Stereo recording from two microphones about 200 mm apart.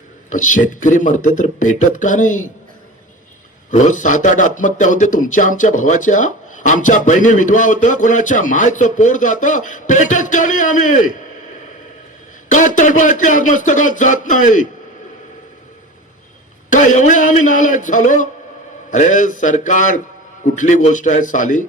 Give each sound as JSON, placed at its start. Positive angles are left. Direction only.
{"t": 0.3, "sound": "a man's voice", "side_deg": 40}
{"t": 3.7, "sound": "a man's voice", "side_deg": 40}
{"t": 12.5, "sound": "a man's voice", "side_deg": 40}
{"t": 16.6, "sound": "a man's voice", "side_deg": 40}